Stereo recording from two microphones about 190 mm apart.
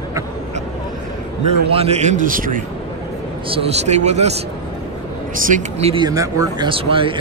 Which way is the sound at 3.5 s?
35° right (ahead or behind).